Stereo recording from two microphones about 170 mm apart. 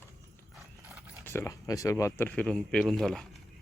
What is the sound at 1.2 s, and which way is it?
Speech, 15° left (ahead or behind).